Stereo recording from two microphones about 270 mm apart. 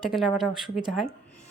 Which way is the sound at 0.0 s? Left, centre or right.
Centre.